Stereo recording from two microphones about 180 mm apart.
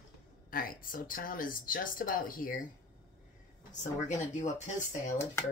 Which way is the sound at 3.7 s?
45° left (ahead or behind).